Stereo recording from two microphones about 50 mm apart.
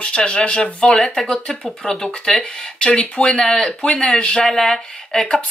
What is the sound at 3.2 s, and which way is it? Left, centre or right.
Speech, centre.